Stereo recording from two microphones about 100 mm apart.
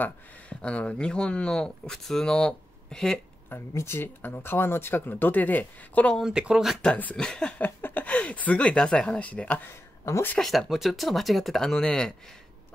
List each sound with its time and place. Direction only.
0.0 s speech: 10° left (ahead or behind)
3.4 s speech: 25° left (ahead or behind)
6.1 s speech: 5° right (ahead or behind)
6.8 s speech: 10° left (ahead or behind)
9.7 s a sound: 30° left (ahead or behind)
10.4 s speech: centre (ahead or behind)